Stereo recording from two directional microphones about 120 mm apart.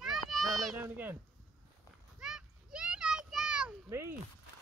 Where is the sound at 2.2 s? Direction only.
5° right (ahead or behind).